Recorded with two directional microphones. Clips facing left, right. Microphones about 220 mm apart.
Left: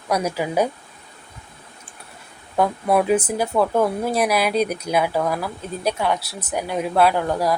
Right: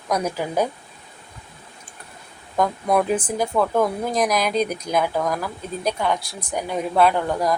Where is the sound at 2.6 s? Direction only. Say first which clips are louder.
Left 1 dB; 5° left (ahead or behind).